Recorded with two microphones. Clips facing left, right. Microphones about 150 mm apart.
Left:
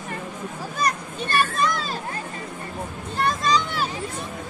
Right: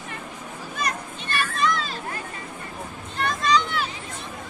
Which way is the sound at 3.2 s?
35° left (ahead or behind).